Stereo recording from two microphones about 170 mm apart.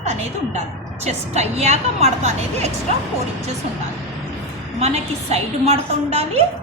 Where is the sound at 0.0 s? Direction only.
40° right (ahead or behind).